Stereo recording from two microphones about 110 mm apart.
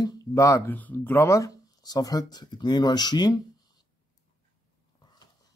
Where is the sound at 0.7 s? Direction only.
15° left (ahead or behind); by 3.4 s 40° left (ahead or behind).